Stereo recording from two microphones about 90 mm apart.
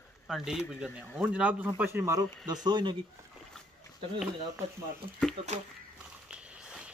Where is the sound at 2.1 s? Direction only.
40° right (ahead or behind).